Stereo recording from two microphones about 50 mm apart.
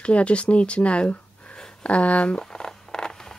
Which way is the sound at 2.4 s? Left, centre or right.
Centre.